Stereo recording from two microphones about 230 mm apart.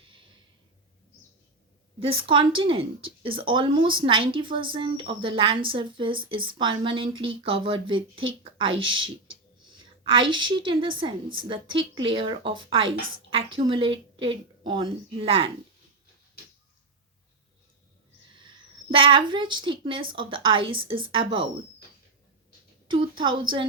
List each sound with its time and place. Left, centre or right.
2.0 s speech: right
9.2 s a sound: right
10.1 s speech: right
18.3 s speech: right
22.9 s speech: right